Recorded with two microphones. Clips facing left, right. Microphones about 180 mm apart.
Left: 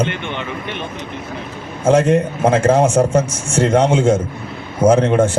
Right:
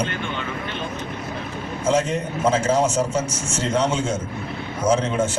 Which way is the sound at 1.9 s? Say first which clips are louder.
Left 8 dB; 55° left (ahead or behind).